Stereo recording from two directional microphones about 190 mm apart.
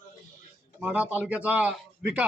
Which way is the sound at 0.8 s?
5° right (ahead or behind).